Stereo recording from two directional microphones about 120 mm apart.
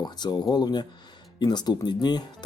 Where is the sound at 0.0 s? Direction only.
35° left (ahead or behind).